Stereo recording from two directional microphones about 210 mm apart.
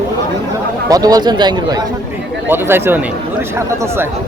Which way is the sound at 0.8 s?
15° right (ahead or behind).